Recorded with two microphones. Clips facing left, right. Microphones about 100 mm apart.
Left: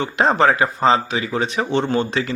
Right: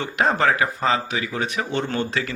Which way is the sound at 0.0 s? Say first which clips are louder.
Left 4 dB; 25° left (ahead or behind).